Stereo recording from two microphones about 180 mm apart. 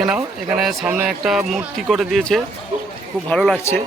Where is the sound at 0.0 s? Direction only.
5° right (ahead or behind).